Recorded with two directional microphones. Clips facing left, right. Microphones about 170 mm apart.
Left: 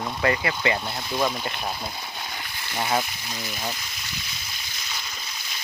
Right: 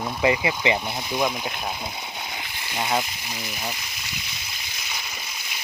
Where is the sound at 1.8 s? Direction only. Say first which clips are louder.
Right 1 dB; 20° right (ahead or behind).